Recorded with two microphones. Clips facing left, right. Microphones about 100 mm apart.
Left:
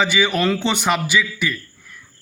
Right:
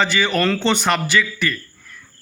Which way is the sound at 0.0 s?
10° left (ahead or behind).